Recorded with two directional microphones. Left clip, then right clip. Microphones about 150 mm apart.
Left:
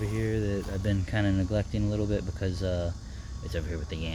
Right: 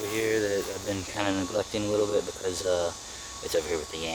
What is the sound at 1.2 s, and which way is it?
Speech, 30° right (ahead or behind).